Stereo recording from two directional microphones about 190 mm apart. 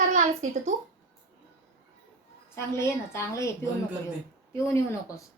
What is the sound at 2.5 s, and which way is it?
Speech, 15° left (ahead or behind).